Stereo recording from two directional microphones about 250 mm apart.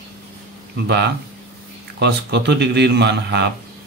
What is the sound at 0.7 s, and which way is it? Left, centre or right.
A man's voice, right.